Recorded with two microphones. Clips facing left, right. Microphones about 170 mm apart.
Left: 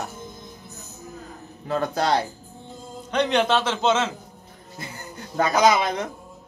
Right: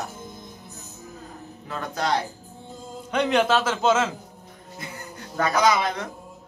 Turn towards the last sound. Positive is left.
turn(degrees=20)  # may be behind; listen again after turning